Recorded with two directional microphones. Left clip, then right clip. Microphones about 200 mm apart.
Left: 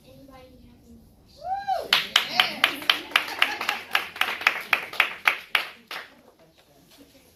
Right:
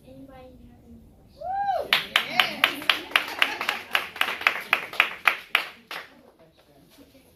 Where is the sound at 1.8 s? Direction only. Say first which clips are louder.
Left 1 dB; 30° right (ahead or behind).